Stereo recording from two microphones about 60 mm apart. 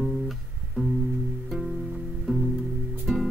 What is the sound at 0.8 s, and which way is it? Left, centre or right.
Music, centre.